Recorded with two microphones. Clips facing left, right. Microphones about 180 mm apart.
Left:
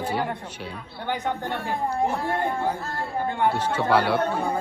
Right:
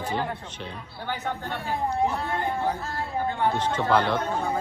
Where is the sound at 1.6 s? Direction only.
55° left (ahead or behind).